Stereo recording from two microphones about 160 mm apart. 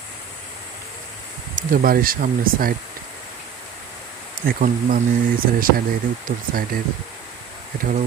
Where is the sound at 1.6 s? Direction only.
60° right (ahead or behind).